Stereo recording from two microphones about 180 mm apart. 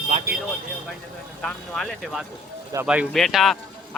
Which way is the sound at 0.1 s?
40° right (ahead or behind).